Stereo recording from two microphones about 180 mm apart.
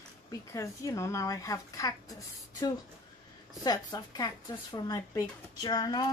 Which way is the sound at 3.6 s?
20° left (ahead or behind).